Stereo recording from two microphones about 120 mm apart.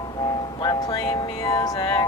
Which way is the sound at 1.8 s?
40° left (ahead or behind).